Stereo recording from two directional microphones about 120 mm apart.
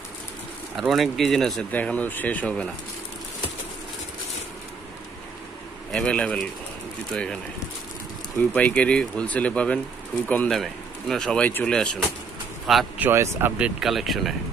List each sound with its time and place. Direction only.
0.7 s speech: centre (ahead or behind)
1.7 s speech: 15° left (ahead or behind)
5.9 s speech: 5° left (ahead or behind)
8.4 s speech: 10° left (ahead or behind)
13.0 s speech: 20° right (ahead or behind)
13.6 s speech: 5° right (ahead or behind)